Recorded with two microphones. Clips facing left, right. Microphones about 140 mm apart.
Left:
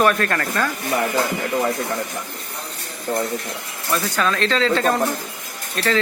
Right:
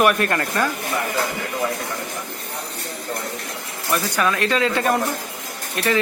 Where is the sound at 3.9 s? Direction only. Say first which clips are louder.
Even; 10° right (ahead or behind).